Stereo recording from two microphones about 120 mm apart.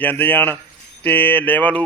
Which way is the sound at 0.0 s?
15° left (ahead or behind).